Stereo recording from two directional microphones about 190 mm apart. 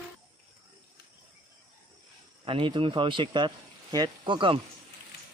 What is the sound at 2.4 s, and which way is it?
Speech, 30° right (ahead or behind).